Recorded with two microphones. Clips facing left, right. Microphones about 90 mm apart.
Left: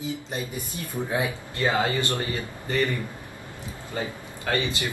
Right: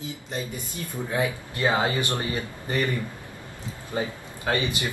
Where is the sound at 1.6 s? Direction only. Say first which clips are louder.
Even; 20° right (ahead or behind).